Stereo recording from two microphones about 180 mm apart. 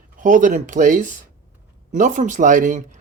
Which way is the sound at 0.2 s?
45° right (ahead or behind).